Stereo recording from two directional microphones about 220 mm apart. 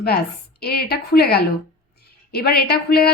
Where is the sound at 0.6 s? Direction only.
45° left (ahead or behind).